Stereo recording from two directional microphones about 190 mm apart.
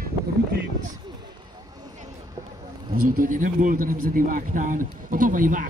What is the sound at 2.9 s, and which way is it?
A man's voice, 45° right (ahead or behind).